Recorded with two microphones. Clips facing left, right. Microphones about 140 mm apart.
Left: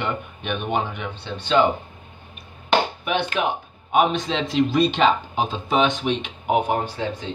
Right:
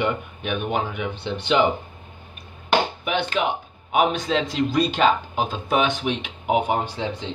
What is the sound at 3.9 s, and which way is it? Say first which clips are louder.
Speech: even; 5° right (ahead or behind).